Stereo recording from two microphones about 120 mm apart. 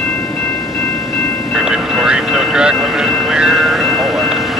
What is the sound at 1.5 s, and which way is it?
Vehicle, 5° right (ahead or behind).